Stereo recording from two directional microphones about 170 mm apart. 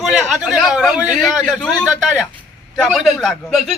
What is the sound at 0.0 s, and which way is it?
A man's voice, centre (ahead or behind).